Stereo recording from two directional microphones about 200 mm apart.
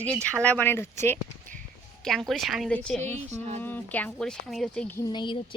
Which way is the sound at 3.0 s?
35° right (ahead or behind).